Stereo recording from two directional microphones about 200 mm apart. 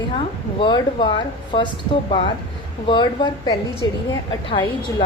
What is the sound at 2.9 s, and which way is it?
A woman's voice, 20° left (ahead or behind).